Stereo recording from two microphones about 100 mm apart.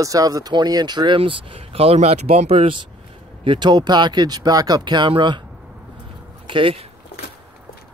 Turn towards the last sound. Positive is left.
turn(degrees=-60)  # may be behind; listen again after turning